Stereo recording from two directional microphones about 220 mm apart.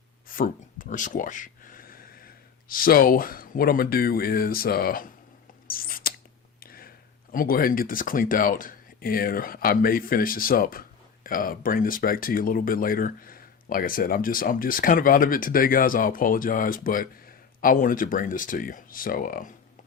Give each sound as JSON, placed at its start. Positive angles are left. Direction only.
{"t": 0.3, "sound": "speech", "side_deg": 40}
{"t": 5.6, "sound": "a sound", "side_deg": 40}
{"t": 7.3, "sound": "speech", "side_deg": 40}